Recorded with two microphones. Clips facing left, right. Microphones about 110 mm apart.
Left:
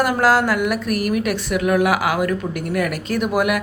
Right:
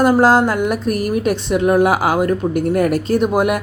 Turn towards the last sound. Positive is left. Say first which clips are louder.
# right 4 dB
turn(degrees=-30)  # may be behind; listen again after turning